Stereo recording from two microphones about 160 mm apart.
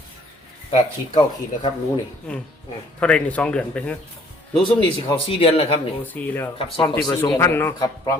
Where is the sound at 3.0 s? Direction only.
5° left (ahead or behind).